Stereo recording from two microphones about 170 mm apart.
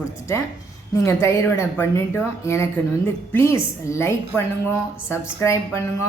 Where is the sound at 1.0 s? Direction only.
15° left (ahead or behind).